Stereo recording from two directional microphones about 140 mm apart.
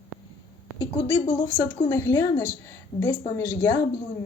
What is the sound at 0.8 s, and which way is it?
Speech, 35° left (ahead or behind).